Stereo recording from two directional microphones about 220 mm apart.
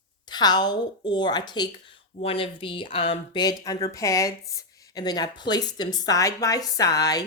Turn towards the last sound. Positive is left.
turn(degrees=15)  # may be behind; listen again after turning